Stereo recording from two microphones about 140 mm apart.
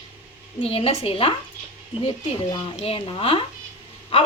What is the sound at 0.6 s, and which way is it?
Speech, 45° left (ahead or behind).